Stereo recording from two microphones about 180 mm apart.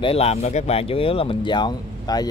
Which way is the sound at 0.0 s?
35° left (ahead or behind).